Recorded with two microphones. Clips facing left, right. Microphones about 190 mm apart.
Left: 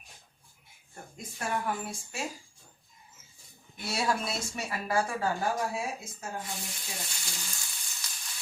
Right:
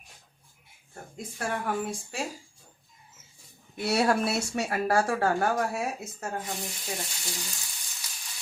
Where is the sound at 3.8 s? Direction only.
65° right (ahead or behind).